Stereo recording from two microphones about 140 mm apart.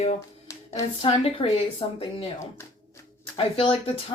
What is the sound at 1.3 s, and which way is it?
Speech, 45° left (ahead or behind).